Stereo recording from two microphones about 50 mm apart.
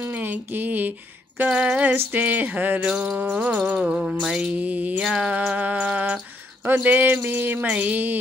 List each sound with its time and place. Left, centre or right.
0.1 s a sound: right
1.5 s female singing: right
2.1 s speech: right
2.8 s female singing: centre
3.1 s speech: right
3.5 s female singing: right
3.9 s music: centre
4.5 s speech: right
5.0 s music: centre
5.6 s speech: right
7.2 s a sound: right
7.6 s speech: right